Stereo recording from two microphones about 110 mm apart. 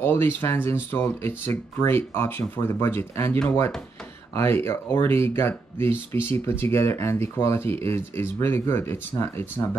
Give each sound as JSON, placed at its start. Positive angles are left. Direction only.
{"t": 0.0, "sound": "speech", "side_deg": 20}
{"t": 4.4, "sound": "speech", "side_deg": 25}